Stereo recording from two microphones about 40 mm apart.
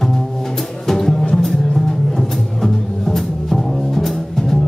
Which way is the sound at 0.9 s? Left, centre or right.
Centre.